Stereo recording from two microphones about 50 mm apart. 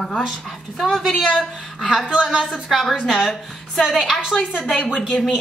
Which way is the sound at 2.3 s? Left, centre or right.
Centre.